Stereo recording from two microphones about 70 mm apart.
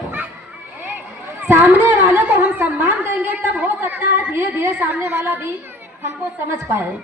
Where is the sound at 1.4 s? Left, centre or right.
Right.